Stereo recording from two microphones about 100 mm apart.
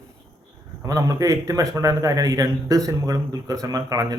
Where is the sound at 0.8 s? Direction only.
35° right (ahead or behind).